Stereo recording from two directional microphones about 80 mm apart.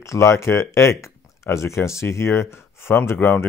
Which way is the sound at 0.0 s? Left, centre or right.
Left.